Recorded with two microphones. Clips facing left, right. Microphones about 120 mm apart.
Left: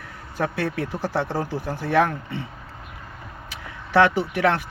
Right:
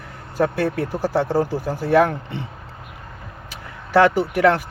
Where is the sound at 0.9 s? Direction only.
10° right (ahead or behind).